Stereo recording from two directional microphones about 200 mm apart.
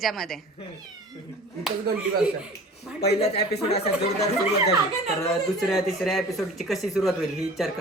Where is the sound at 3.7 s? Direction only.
30° left (ahead or behind).